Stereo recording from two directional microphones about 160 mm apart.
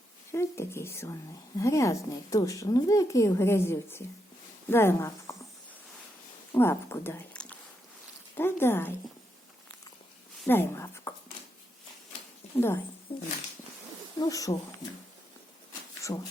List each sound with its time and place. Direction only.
0.3 s speech: 15° left (ahead or behind)
6.6 s speech: 15° left (ahead or behind)
10.4 s speech: 15° left (ahead or behind)
12.5 s speech: 15° left (ahead or behind)
13.1 s speech: 30° left (ahead or behind)
14.2 s speech: 20° left (ahead or behind)
16.1 s speech: 25° left (ahead or behind)